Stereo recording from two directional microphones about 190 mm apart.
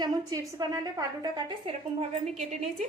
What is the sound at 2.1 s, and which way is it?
Speech, 35° right (ahead or behind).